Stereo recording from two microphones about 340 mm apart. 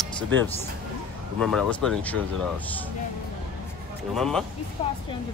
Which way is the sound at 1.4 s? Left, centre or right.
Centre.